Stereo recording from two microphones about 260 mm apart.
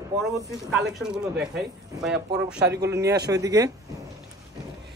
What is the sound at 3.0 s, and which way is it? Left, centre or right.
Speech, right.